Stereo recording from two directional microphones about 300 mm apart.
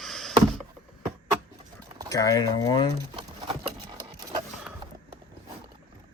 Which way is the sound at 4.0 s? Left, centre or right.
Centre.